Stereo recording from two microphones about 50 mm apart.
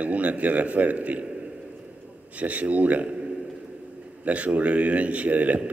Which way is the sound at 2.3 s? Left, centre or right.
Right.